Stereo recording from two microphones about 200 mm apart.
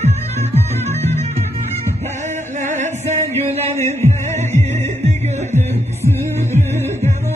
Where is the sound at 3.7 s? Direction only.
15° left (ahead or behind).